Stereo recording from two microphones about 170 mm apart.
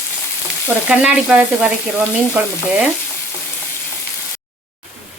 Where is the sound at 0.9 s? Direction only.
5° right (ahead or behind).